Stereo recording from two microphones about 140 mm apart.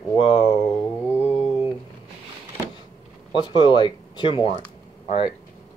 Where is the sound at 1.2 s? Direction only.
5° right (ahead or behind).